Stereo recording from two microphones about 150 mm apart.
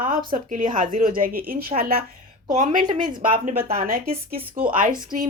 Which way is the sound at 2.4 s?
60° right (ahead or behind).